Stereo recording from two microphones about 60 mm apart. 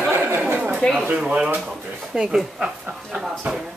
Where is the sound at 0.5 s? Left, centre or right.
Right.